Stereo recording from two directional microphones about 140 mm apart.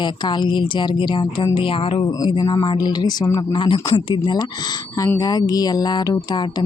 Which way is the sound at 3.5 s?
35° left (ahead or behind).